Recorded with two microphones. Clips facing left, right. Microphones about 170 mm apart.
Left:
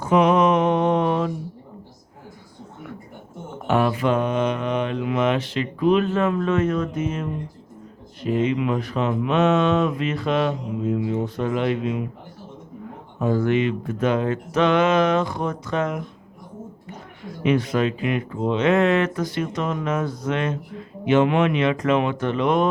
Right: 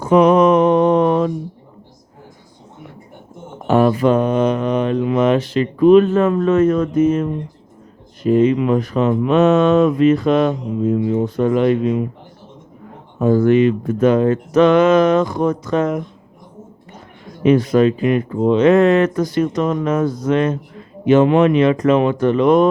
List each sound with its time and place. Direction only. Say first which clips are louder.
0.1 s mantra: right 6 dB; 40° right (ahead or behind)
3.7 s mantra: right 7 dB; 40° right (ahead or behind)
8.2 s speech: right 8 dB; 45° right (ahead or behind)
13.1 s speech: right 8 dB; 45° right (ahead or behind)
17.2 s speech: right 7 dB; 40° right (ahead or behind)